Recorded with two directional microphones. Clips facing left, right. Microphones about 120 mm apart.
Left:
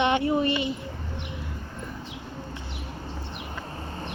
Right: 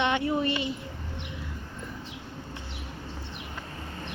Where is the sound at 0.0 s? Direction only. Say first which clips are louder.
Left 3 dB; 15° left (ahead or behind).